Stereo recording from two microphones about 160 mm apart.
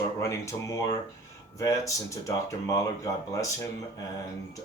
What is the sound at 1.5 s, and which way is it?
Speech, 20° left (ahead or behind).